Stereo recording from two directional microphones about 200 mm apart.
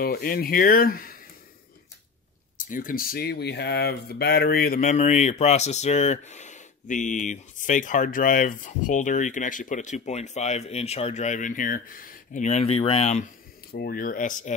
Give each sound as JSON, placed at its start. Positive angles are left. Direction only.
{"t": 0.0, "sound": "speech", "side_deg": 50}
{"t": 2.5, "sound": "speech", "side_deg": 45}
{"t": 13.7, "sound": "speech", "side_deg": 50}